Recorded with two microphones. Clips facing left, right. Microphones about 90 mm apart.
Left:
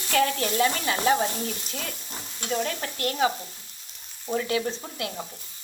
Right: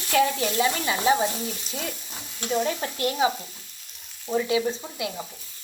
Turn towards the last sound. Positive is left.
turn(degrees=-10)  # may be behind; listen again after turning